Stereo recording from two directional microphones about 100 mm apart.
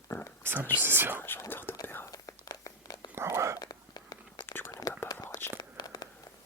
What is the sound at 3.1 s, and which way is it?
Whispering, 25° right (ahead or behind).